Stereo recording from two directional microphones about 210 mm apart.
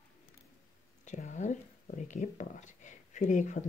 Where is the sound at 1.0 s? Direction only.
35° left (ahead or behind).